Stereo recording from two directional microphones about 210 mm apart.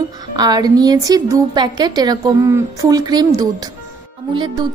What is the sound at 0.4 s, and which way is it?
A woman's voice, 20° right (ahead or behind).